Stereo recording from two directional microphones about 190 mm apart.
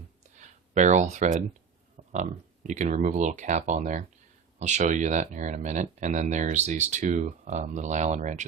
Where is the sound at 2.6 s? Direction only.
40° right (ahead or behind).